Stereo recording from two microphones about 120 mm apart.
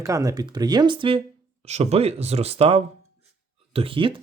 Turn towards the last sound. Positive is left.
turn(degrees=-45)  # may be behind; listen again after turning